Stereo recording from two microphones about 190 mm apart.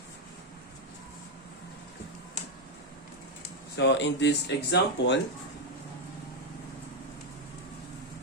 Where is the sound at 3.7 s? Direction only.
70° left (ahead or behind).